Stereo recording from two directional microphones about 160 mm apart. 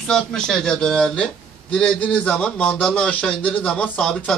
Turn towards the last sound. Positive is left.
turn(degrees=5)  # may be behind; listen again after turning